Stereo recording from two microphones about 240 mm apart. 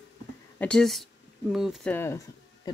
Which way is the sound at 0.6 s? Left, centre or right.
Centre.